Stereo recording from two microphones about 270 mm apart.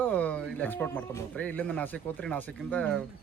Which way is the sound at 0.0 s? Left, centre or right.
Centre.